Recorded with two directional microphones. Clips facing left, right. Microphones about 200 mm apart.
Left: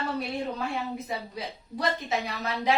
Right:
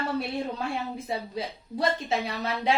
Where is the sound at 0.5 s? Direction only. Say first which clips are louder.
Even; 30° right (ahead or behind).